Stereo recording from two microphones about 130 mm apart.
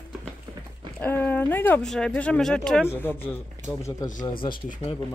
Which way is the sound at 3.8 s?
30° left (ahead or behind).